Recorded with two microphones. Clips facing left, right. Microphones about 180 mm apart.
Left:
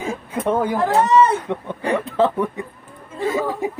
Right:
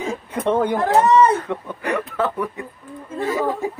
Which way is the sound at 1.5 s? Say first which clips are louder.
Left 2 dB; 25° left (ahead or behind).